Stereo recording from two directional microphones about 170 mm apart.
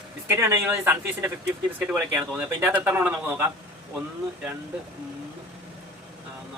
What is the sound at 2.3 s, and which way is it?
Speech, 10° right (ahead or behind).